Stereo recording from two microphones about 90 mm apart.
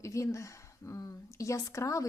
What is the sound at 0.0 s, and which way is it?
Speech, 35° left (ahead or behind).